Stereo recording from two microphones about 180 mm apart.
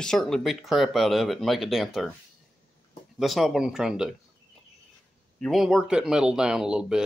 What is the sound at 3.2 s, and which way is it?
Speech, centre (ahead or behind).